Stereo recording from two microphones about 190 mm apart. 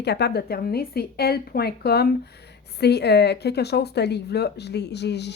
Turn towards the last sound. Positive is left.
turn(degrees=60)  # may be behind; listen again after turning